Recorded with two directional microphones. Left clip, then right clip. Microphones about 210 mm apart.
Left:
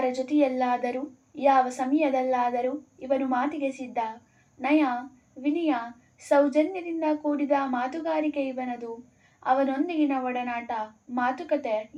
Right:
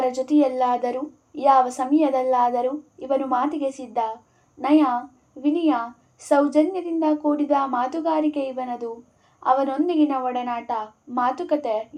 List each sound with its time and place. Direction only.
0.0 s a woman's voice: 35° right (ahead or behind)